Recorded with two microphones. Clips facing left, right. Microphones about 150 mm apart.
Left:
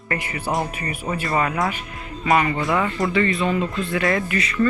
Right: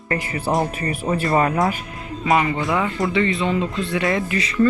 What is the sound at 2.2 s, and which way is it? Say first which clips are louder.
Speech: even; 20° right (ahead or behind).